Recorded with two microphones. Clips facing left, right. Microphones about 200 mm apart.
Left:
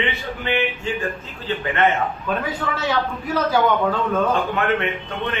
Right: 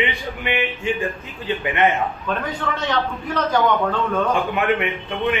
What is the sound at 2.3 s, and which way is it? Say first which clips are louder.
A man's voice: even; 5° left (ahead or behind).